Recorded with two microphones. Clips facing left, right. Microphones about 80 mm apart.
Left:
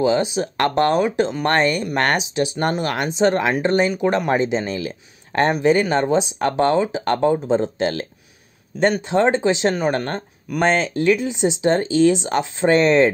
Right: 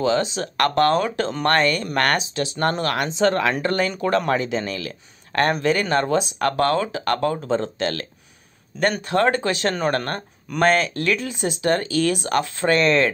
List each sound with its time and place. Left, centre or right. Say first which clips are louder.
0.0 s speech: left 3 dB; centre